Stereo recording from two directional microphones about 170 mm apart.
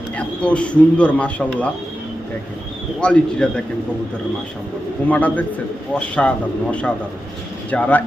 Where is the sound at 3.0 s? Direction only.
5° left (ahead or behind).